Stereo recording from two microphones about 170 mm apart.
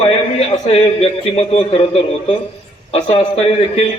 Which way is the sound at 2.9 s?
35° left (ahead or behind).